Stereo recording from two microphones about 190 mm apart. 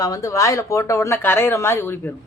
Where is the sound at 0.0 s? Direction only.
15° left (ahead or behind).